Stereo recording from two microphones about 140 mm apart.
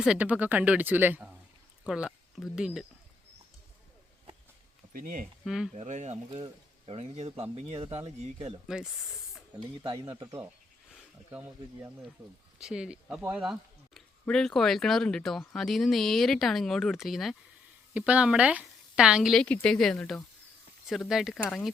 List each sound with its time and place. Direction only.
0.0 s speech: 10° right (ahead or behind)
4.9 s speech: 80° right
5.5 s speech: 5° right (ahead or behind)
5.7 s speech: 55° right (ahead or behind)
8.6 s speech: 5° right (ahead or behind)
9.8 s speech: 40° right (ahead or behind)
11.3 s speech: 15° right (ahead or behind)